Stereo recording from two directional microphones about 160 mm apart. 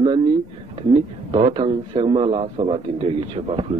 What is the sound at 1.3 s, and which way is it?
A man's voice, 30° right (ahead or behind).